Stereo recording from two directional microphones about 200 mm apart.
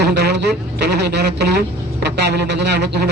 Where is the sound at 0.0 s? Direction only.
55° right (ahead or behind).